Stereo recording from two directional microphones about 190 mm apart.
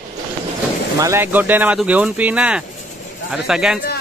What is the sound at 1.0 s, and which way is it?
Speech, 15° right (ahead or behind).